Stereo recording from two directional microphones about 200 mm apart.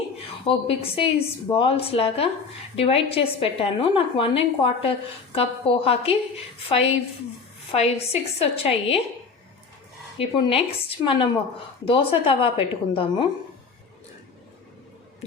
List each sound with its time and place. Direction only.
0.4 s a woman's voice: 30° left (ahead or behind)
10.2 s a woman's voice: 25° left (ahead or behind)